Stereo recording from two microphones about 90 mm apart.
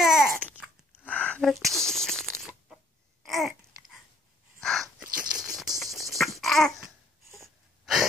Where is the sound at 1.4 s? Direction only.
Centre (ahead or behind).